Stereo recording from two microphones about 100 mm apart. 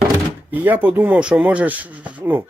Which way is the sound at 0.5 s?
20° right (ahead or behind).